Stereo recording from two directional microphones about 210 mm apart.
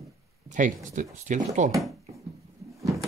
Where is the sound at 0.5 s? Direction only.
35° right (ahead or behind).